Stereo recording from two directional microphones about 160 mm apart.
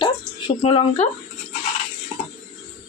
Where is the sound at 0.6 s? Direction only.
40° left (ahead or behind).